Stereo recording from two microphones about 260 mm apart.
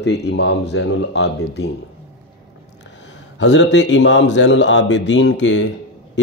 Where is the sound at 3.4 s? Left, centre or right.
Left.